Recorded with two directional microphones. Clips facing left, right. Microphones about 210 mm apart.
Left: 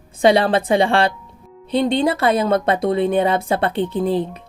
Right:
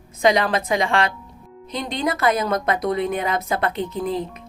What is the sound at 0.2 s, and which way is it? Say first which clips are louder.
Speech: left 4 dB; 30° left (ahead or behind).